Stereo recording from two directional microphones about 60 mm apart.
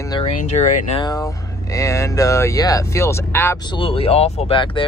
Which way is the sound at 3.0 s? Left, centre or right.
Left.